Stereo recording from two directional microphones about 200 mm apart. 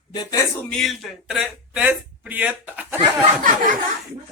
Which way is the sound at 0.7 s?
Centre (ahead or behind).